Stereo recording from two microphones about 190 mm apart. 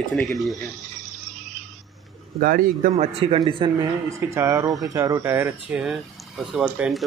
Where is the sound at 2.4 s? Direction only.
50° right (ahead or behind).